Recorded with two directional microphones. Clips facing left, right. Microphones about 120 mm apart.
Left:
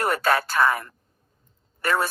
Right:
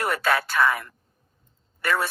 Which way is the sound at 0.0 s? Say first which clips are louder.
Left 2 dB; 40° left (ahead or behind).